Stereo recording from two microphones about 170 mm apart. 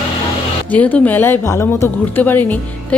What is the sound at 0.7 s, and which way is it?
A woman's voice, 10° left (ahead or behind).